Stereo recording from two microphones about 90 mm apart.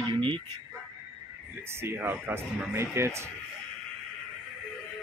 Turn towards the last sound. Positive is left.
turn(degrees=-30)  # may be behind; listen again after turning